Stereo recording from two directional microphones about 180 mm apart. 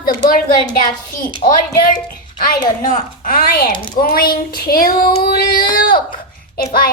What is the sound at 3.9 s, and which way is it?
Child singing, 55° left (ahead or behind).